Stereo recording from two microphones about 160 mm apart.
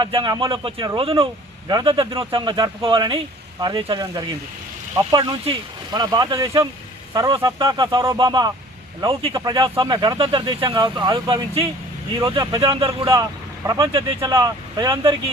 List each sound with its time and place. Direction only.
0.0 s speech: 30° right (ahead or behind)
13.7 s speech: 20° right (ahead or behind)
13.9 s speech: 30° right (ahead or behind)